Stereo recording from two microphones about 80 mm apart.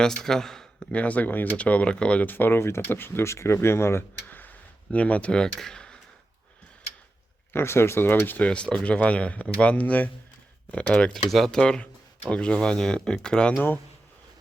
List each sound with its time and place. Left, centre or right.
0.0 s speech: centre
7.5 s speech: left
8.4 s speech: centre